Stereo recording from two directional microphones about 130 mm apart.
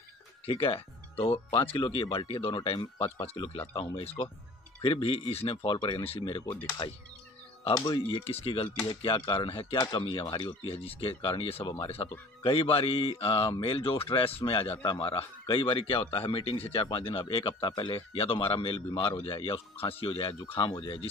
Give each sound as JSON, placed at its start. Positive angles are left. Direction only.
{"t": 0.5, "sound": "speech", "side_deg": 45}
{"t": 6.4, "sound": "speech", "side_deg": 20}
{"t": 7.7, "sound": "speech", "side_deg": 30}
{"t": 8.3, "sound": "speech", "side_deg": 50}
{"t": 8.7, "sound": "speech", "side_deg": 35}